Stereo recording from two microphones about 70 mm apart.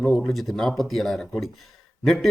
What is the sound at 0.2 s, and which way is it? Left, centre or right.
Speech, centre.